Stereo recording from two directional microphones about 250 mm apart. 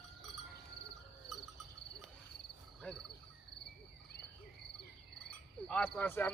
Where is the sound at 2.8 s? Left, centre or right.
Centre.